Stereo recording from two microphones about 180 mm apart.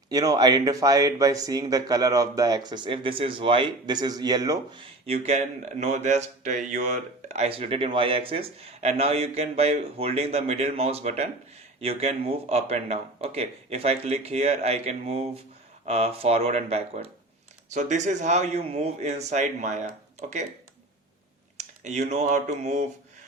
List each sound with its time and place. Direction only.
0.1 s speech: 20° right (ahead or behind); by 19.9 s 40° right (ahead or behind)
21.6 s speech: 40° right (ahead or behind)